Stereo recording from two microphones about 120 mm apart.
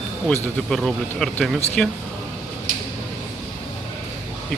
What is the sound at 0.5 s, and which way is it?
Speech, 5° left (ahead or behind).